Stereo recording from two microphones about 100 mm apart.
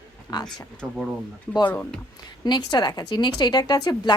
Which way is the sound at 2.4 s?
45° left (ahead or behind).